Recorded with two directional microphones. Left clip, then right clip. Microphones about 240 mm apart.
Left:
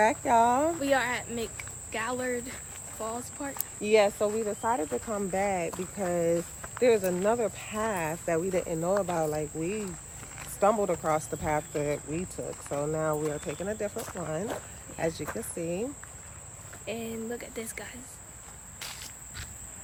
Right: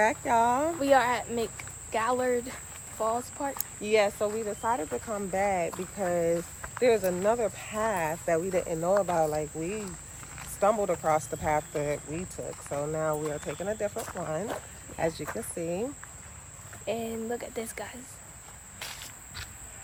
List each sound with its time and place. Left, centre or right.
0.0 s speech: centre
0.7 s speech: centre
3.6 s speech: centre
18.8 s insect: centre